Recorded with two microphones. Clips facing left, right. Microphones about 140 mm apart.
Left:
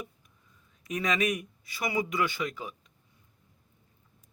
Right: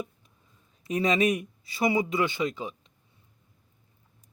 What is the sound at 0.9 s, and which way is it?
Speech, 30° right (ahead or behind).